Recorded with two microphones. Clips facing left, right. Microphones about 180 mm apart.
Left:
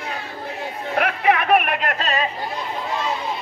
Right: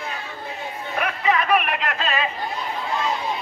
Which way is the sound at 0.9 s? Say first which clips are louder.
Left 3 dB; 65° left (ahead or behind).